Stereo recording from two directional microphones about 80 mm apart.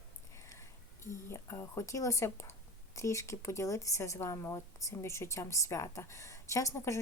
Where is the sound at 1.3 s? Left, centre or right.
Left.